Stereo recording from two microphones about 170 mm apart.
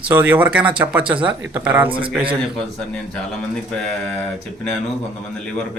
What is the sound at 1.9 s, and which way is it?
Speech, 30° right (ahead or behind).